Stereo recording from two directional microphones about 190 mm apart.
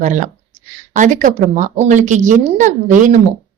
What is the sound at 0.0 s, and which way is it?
Speech, 40° right (ahead or behind).